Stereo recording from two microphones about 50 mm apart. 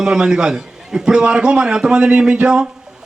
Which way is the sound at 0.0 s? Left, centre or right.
Centre.